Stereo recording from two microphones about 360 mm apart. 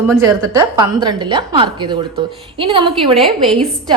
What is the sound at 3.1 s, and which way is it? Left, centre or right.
Speech, centre.